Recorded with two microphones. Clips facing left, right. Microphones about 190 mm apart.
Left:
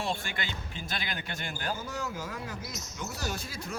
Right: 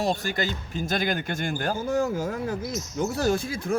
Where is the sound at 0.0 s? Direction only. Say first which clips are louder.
Right 8 dB; 40° right (ahead or behind).